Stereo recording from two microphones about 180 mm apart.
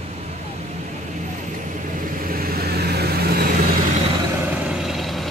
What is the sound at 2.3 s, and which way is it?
Vehicle, 55° right (ahead or behind).